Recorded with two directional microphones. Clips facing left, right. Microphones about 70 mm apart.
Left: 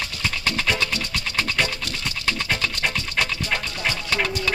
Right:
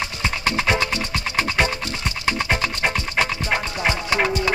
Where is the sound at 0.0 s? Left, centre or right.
Right.